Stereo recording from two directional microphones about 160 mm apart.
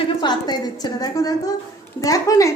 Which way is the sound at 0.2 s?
25° left (ahead or behind).